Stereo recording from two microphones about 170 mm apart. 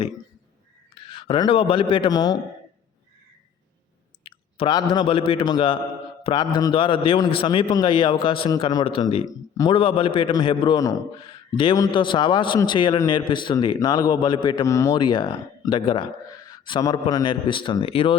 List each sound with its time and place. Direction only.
1.0 s a man's voice: 30° left (ahead or behind)
4.2 s a man's voice: 35° left (ahead or behind)